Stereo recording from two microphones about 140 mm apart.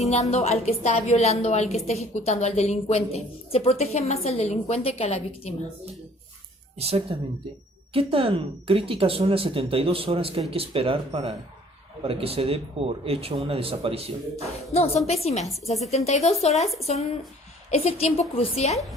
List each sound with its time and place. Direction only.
0.0 s a woman's voice: 50° left (ahead or behind)
6.7 s speech: 45° right (ahead or behind)
14.7 s a woman's voice: 50° left (ahead or behind)
17.7 s a woman's voice: 50° left (ahead or behind)